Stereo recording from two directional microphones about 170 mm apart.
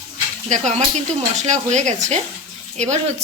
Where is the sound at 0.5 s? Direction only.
45° right (ahead or behind).